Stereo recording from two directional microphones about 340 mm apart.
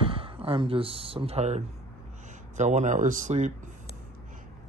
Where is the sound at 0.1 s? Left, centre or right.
Centre.